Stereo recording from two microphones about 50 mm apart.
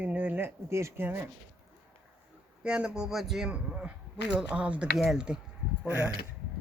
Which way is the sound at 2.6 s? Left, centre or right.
Centre.